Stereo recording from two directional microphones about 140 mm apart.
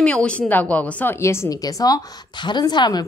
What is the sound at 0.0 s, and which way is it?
A woman's voice, 10° left (ahead or behind).